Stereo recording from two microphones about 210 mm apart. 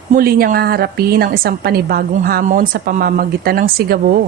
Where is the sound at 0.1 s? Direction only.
45° right (ahead or behind).